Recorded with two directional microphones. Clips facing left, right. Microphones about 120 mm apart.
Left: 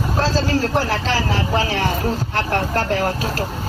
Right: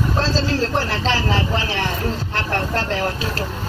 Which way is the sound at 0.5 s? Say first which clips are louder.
Left 2 dB; 40° left (ahead or behind).